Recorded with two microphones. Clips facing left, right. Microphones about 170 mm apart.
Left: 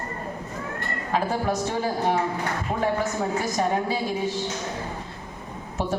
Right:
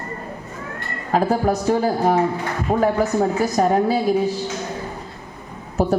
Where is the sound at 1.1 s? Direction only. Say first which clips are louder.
Right 7 dB; 40° right (ahead or behind).